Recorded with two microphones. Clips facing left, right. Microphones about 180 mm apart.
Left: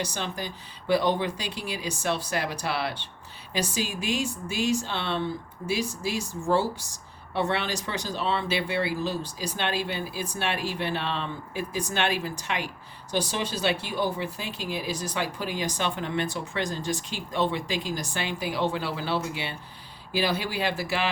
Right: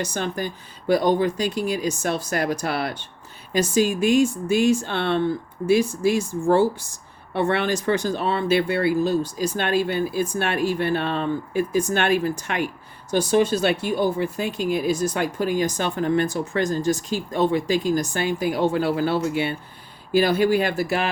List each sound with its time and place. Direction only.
0.0 s speech: 50° right (ahead or behind)